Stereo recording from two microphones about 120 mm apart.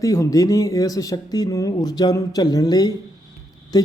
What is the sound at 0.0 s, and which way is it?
Speech, 30° left (ahead or behind).